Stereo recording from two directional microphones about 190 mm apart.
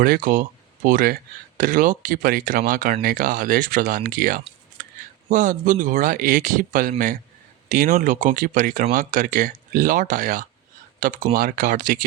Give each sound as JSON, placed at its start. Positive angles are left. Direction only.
{"t": 0.0, "sound": "speech", "side_deg": -50}